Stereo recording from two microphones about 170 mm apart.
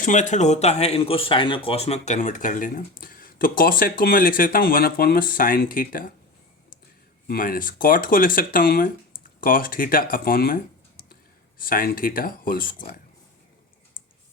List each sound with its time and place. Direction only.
0.0 s speech: 45° left (ahead or behind)
7.3 s speech: 60° left (ahead or behind)
11.6 s speech: 55° left (ahead or behind)